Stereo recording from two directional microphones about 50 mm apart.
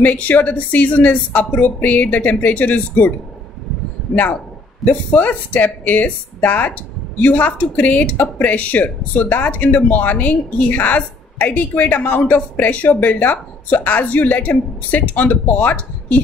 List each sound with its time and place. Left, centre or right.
0.0 s speech: left
4.1 s speech: left